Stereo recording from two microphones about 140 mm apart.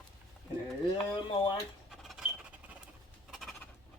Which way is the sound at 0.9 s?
35° left (ahead or behind).